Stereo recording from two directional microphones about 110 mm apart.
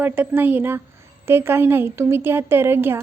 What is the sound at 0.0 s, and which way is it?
A woman's voice, 15° right (ahead or behind).